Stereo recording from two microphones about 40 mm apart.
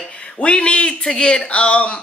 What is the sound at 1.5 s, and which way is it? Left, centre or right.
Speech, left.